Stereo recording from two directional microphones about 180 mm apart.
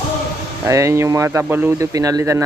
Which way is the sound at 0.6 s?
15° right (ahead or behind).